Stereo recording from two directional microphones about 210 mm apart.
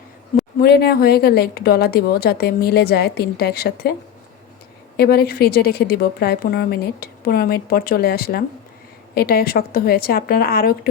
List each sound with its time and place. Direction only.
0.6 s a woman's voice: 50° left (ahead or behind)
4.9 s a woman's voice: 45° left (ahead or behind)